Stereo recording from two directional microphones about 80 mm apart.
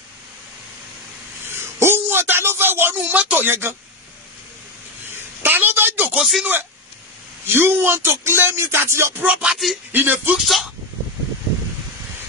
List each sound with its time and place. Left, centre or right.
1.8 s a man's voice: right
5.4 s a sound: right
6.1 s speech: centre
7.4 s speech: right
9.2 s music: centre
9.9 s speech: right
10.4 s speech: centre